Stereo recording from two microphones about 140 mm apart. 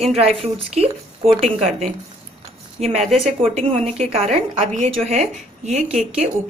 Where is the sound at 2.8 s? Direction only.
55° right (ahead or behind).